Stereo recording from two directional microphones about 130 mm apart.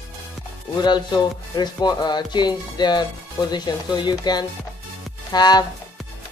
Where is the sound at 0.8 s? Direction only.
35° left (ahead or behind).